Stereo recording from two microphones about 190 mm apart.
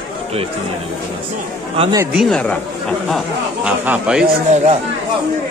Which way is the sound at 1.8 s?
20° right (ahead or behind).